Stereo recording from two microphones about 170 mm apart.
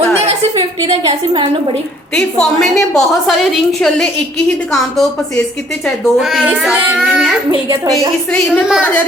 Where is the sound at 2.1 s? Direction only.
5° left (ahead or behind).